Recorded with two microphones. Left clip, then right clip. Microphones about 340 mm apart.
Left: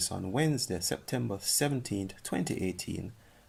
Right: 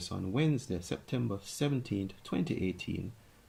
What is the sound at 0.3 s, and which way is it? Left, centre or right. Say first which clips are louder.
Speech: left 3 dB; left.